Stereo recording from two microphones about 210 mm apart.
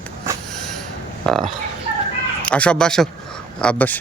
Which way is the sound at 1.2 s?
Centre (ahead or behind).